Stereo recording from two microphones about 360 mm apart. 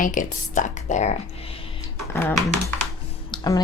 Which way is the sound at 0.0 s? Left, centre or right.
Left.